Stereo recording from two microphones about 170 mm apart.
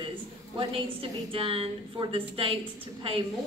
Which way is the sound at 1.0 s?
30° right (ahead or behind).